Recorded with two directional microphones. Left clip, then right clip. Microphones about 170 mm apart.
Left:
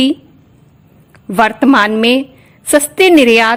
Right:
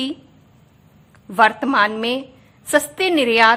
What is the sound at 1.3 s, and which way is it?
A woman's voice, 40° left (ahead or behind).